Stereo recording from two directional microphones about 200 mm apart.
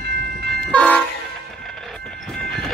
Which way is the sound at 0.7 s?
5° left (ahead or behind).